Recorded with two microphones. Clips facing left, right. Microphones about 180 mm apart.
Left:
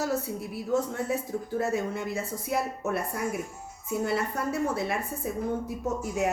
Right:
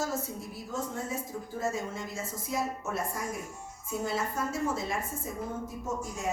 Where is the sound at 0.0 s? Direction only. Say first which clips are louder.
Left 4 dB; 65° left (ahead or behind).